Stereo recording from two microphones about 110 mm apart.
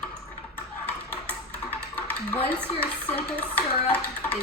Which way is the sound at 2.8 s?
15° left (ahead or behind).